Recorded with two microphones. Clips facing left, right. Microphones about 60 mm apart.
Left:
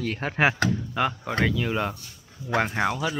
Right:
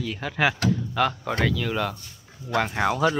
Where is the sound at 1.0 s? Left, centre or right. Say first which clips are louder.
Even; centre.